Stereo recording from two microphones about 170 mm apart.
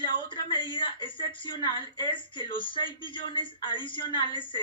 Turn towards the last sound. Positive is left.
turn(degrees=30)  # may be behind; listen again after turning